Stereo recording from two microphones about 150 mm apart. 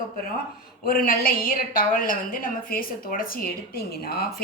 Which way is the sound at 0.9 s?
75° left (ahead or behind).